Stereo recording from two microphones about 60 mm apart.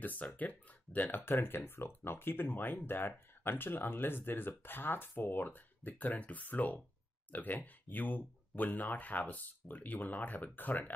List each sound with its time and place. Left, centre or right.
0.0 s speech: left